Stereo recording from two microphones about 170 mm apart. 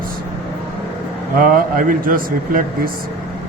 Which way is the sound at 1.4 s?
55° right (ahead or behind).